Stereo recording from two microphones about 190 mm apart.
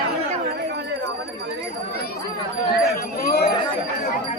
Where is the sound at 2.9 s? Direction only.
55° left (ahead or behind).